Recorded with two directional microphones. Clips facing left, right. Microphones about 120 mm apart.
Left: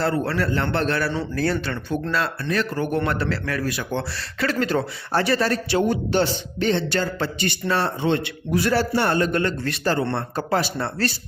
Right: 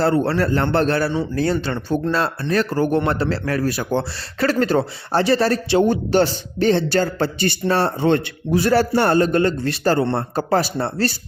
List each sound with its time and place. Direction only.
0.0 s speech: 30° right (ahead or behind)
1.1 s speech: 20° right (ahead or behind); by 8.3 s 45° right (ahead or behind)
8.4 s speech: 30° right (ahead or behind)
8.7 s speech: 45° right (ahead or behind)